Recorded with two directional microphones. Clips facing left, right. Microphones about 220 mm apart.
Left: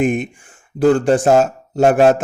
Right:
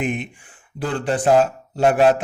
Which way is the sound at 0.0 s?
45° left (ahead or behind).